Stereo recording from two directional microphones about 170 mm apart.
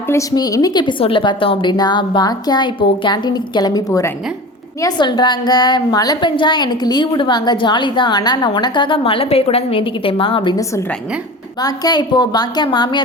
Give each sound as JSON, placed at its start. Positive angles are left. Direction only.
{"t": 0.1, "sound": "a woman's voice", "side_deg": 20}
{"t": 11.6, "sound": "a woman's voice", "side_deg": 25}